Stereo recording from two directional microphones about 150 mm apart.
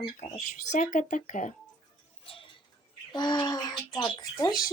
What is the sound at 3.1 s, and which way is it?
Bird, 30° left (ahead or behind).